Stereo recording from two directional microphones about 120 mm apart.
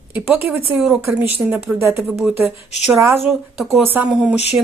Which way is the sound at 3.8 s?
15° right (ahead or behind).